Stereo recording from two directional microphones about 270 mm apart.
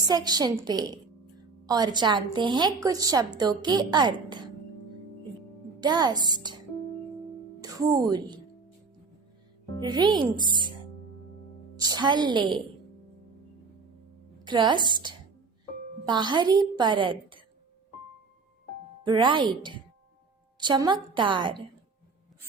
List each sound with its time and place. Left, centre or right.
0.1 s a woman's voice: centre
5.8 s a woman's voice: centre
7.6 s speech: centre
9.8 s a woman's voice: centre
11.8 s a woman's voice: centre
14.4 s a woman's voice: centre
16.0 s a woman's voice: centre
19.0 s a woman's voice: centre
20.6 s a woman's voice: centre